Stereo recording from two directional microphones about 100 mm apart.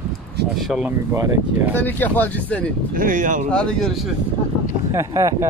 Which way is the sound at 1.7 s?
20° left (ahead or behind).